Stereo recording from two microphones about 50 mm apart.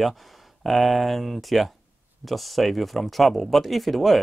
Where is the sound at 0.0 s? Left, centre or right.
Centre.